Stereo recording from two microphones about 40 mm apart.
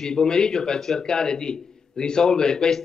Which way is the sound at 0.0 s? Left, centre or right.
Centre.